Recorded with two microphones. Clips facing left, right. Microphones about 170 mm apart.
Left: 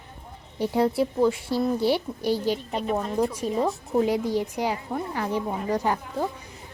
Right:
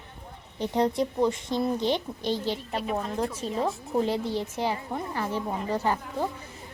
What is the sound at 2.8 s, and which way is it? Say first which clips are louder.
Speech: left 4 dB; centre (ahead or behind).